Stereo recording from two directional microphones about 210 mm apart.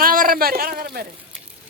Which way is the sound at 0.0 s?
40° right (ahead or behind).